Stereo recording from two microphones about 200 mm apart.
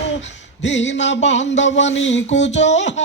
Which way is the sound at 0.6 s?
65° left (ahead or behind).